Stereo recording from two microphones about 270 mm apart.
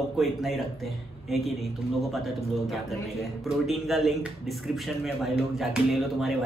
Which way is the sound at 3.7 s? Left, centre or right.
Centre.